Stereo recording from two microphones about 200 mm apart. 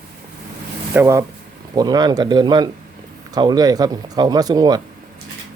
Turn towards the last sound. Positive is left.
turn(degrees=-20)  # may be behind; listen again after turning